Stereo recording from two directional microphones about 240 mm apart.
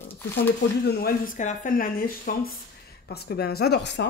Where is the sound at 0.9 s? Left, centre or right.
Left.